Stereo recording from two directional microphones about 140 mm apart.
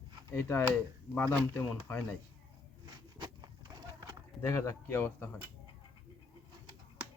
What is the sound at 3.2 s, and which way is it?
Horse, 25° right (ahead or behind).